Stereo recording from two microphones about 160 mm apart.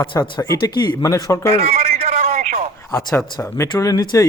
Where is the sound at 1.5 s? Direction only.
40° right (ahead or behind).